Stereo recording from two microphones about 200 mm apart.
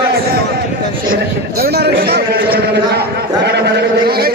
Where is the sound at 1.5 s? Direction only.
50° right (ahead or behind).